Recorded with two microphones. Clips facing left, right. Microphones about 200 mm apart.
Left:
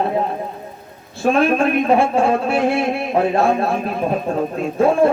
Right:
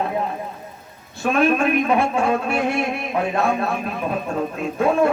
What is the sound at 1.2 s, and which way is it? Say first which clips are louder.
A man's voice: left 3 dB; 30° left (ahead or behind).